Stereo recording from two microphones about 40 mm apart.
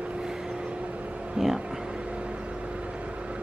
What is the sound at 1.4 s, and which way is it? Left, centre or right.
Speech, right.